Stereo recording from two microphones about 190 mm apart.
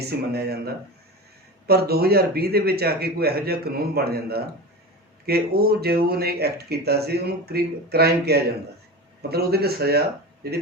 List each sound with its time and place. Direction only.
0.0 s speech: 55° right (ahead or behind)